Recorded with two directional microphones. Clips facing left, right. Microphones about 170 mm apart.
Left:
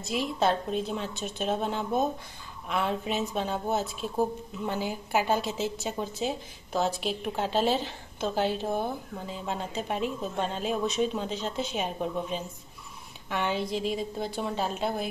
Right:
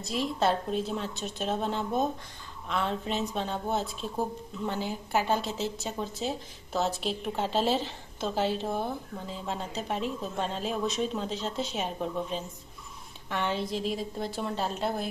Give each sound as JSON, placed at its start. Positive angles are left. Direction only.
{"t": 0.0, "sound": "a woman's voice", "side_deg": 0}